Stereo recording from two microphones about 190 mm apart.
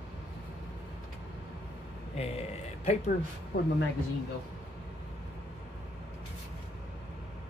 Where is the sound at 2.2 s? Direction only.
35° left (ahead or behind).